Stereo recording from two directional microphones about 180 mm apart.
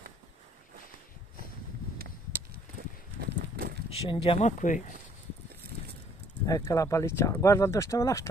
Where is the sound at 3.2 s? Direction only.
60° right (ahead or behind).